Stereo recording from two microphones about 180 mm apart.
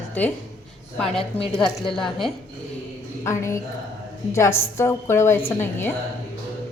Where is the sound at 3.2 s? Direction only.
15° left (ahead or behind).